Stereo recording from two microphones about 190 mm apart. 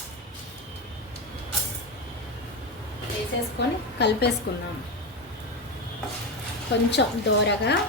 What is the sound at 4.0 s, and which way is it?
Speech, 60° left (ahead or behind).